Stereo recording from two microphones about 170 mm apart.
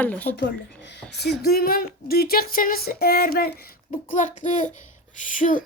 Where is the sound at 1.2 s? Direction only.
70° left (ahead or behind).